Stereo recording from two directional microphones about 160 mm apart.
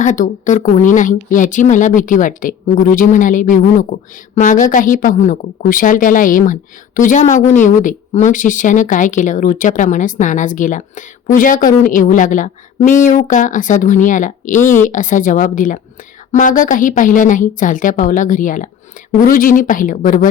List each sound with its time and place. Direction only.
0.0 s a woman's voice: 50° left (ahead or behind)